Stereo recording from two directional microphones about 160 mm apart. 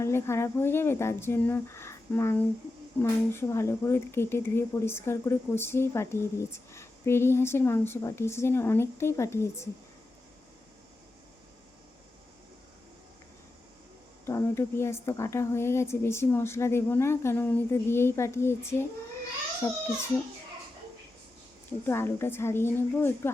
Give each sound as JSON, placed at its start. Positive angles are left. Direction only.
{"t": 0.0, "sound": "speech", "side_deg": 15}
{"t": 14.3, "sound": "speech", "side_deg": 15}
{"t": 21.7, "sound": "speech", "side_deg": 15}